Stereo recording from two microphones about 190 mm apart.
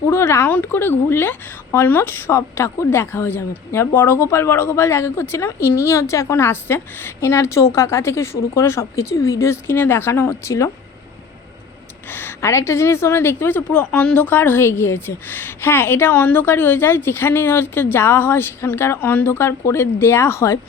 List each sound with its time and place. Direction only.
0.1 s a woman's voice: 15° left (ahead or behind)
12.0 s a woman's voice: 10° left (ahead or behind)